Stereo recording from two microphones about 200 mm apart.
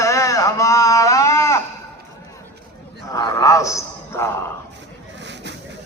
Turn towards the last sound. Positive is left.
turn(degrees=15)  # may be behind; listen again after turning